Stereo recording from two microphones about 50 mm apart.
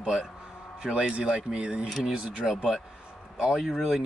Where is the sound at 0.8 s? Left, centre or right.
Centre.